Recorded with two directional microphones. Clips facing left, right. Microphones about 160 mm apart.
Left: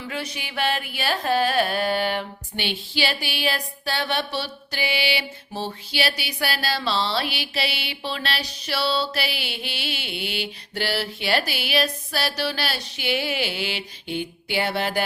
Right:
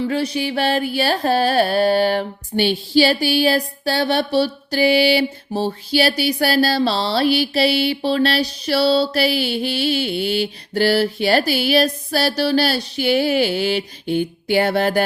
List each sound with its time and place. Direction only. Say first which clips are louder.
0.1 s music: right 11 dB; 35° right (ahead or behind)